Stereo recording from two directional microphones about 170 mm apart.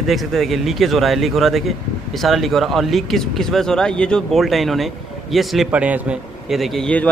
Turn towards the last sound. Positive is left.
turn(degrees=5)  # may be behind; listen again after turning